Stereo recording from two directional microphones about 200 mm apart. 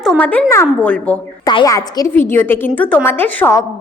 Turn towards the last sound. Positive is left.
turn(degrees=10)  # may be behind; listen again after turning